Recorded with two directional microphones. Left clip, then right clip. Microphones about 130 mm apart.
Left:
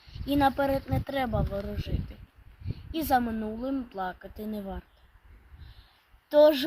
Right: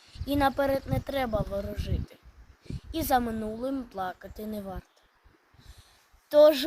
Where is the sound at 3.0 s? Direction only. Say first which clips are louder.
Even; 15° right (ahead or behind).